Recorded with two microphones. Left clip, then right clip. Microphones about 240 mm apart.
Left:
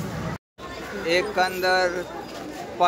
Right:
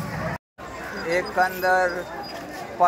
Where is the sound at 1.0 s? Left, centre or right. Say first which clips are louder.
Even; centre.